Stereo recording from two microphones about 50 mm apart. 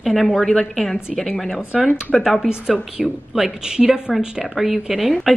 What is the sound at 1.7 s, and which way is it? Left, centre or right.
A woman's voice, centre.